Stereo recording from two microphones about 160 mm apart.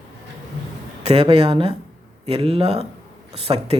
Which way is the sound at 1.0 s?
35° right (ahead or behind).